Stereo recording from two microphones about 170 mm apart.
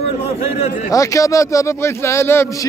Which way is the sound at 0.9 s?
20° left (ahead or behind).